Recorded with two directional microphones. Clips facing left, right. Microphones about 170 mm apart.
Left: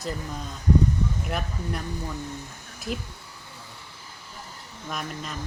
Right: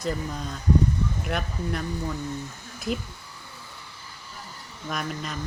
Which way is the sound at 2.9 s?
Centre (ahead or behind).